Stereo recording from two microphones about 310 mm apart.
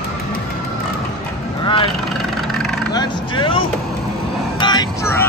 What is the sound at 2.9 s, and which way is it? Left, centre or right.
Vehicle, centre.